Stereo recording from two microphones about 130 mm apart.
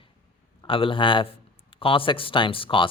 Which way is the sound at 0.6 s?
40° left (ahead or behind).